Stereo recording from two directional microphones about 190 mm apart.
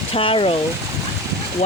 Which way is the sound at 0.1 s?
30° left (ahead or behind).